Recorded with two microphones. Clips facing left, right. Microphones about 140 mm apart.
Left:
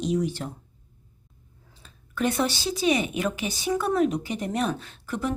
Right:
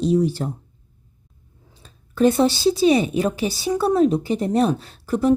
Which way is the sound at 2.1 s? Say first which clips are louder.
Right 9 dB; 30° right (ahead or behind).